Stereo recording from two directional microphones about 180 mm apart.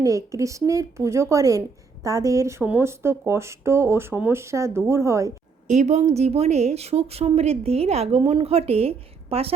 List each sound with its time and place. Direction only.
0.0 s speech: 15° right (ahead or behind)
5.6 s a woman's voice: 40° right (ahead or behind)